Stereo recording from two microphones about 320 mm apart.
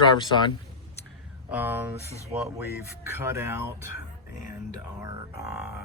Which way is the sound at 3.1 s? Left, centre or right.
Centre.